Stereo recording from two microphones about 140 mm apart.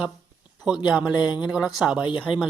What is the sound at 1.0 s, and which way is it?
Speech, 30° left (ahead or behind).